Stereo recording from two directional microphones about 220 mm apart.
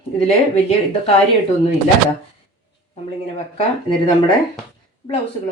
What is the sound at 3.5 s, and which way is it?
Speech, 20° left (ahead or behind).